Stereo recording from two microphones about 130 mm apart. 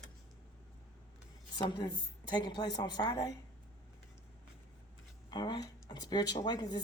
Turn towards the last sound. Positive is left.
turn(degrees=30)  # may be behind; listen again after turning